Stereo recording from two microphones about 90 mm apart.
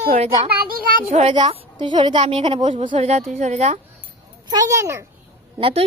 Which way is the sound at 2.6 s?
65° right (ahead or behind).